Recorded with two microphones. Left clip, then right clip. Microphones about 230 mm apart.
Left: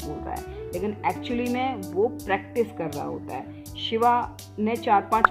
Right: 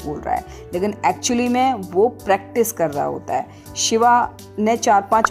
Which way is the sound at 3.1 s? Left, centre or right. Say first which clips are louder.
Right 11 dB; right.